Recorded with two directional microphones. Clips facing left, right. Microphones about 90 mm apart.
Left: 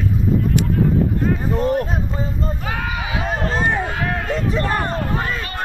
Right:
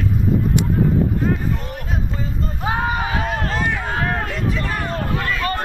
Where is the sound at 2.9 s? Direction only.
40° right (ahead or behind).